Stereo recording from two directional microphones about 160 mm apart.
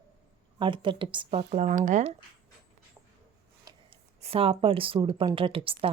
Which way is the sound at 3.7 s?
30° right (ahead or behind).